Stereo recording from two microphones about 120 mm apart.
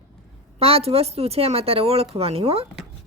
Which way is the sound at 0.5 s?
55° right (ahead or behind).